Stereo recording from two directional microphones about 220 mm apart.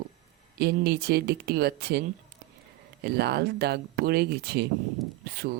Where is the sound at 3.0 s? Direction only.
50° right (ahead or behind).